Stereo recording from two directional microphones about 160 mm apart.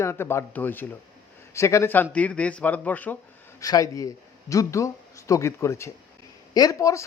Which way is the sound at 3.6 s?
20° left (ahead or behind).